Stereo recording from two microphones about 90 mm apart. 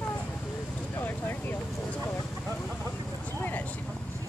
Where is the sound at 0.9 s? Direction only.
20° left (ahead or behind).